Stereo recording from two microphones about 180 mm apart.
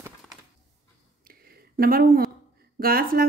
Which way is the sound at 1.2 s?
55° right (ahead or behind).